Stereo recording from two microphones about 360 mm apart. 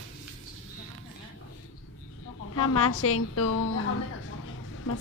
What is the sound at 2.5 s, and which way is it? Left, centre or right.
A woman's voice, left.